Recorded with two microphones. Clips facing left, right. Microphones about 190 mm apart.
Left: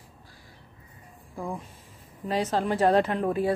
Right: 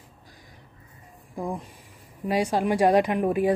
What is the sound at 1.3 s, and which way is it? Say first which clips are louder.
Speech: right 3 dB; 15° right (ahead or behind).